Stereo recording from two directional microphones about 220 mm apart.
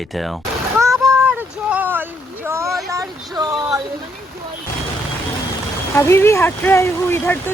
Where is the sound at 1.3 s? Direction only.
5° right (ahead or behind).